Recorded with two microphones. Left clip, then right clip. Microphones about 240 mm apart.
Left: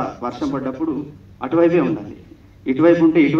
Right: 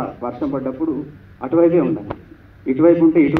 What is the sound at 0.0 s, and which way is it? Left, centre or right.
A man's voice, left.